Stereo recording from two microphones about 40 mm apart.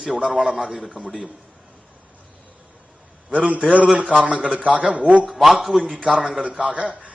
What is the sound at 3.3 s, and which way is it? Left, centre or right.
A man's voice, right.